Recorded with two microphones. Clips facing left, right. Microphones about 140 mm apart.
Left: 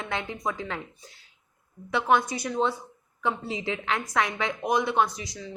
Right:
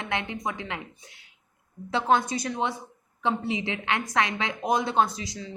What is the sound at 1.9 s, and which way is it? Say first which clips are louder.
Speech: even; 25° right (ahead or behind).